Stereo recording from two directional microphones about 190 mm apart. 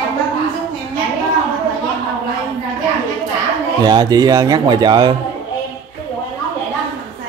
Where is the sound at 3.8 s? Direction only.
20° right (ahead or behind).